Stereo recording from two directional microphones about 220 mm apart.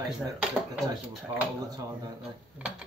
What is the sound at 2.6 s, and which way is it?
Speech, 5° right (ahead or behind).